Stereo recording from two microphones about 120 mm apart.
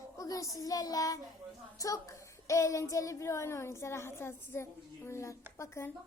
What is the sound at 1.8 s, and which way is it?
Speech, 25° left (ahead or behind).